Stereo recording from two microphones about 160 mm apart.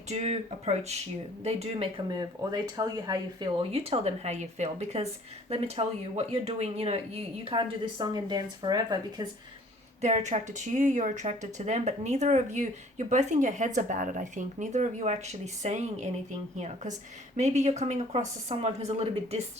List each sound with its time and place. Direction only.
0.1 s speech: 45° right (ahead or behind); by 3.5 s 20° right (ahead or behind)
3.6 s speech: 40° right (ahead or behind)
7.4 s speech: 30° right (ahead or behind)
10.0 s speech: 45° right (ahead or behind)